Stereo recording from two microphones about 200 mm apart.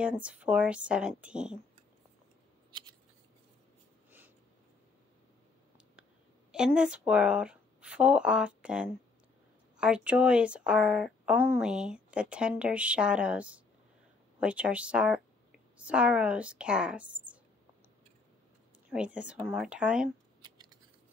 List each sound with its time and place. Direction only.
0.0 s speech: 5° right (ahead or behind)
6.5 s speech: 5° right (ahead or behind)
18.9 s a woman's voice: 5° right (ahead or behind)